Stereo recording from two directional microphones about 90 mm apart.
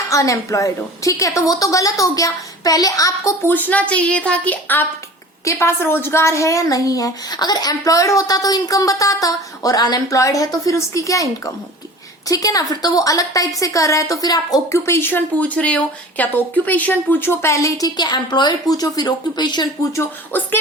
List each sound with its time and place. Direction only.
0.1 s a woman's voice: 35° left (ahead or behind)
3.4 s a woman's voice: 20° left (ahead or behind); by 14.6 s 45° left (ahead or behind)
14.7 s speech: 30° left (ahead or behind)
17.8 s a woman's voice: 50° left (ahead or behind)
20.3 s speech: 20° left (ahead or behind)